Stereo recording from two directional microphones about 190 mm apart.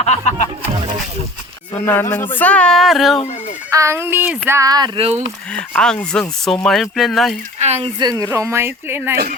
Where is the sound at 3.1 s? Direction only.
35° left (ahead or behind).